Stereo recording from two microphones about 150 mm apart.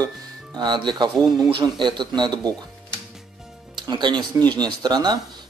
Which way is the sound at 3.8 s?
30° right (ahead or behind).